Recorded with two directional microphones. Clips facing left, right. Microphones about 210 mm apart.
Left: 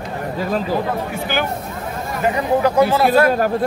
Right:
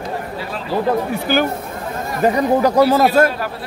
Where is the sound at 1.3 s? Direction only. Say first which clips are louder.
Right 5 dB; 40° right (ahead or behind).